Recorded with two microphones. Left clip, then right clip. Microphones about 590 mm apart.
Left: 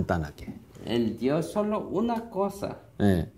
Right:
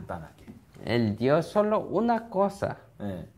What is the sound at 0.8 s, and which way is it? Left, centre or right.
Speech, right.